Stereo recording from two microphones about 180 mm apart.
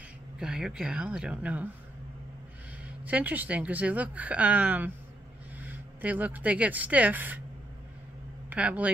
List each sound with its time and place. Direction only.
0.4 s speech: 5° right (ahead or behind)
3.0 s speech: 10° right (ahead or behind)
8.5 s speech: 10° right (ahead or behind)